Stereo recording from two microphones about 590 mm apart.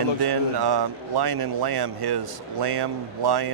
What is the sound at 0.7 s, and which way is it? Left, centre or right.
A man's voice, right.